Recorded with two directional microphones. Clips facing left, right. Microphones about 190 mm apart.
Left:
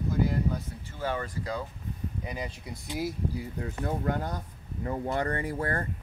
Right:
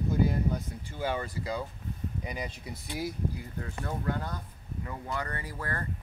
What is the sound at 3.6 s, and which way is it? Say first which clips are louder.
Speech: left 3 dB; 20° left (ahead or behind).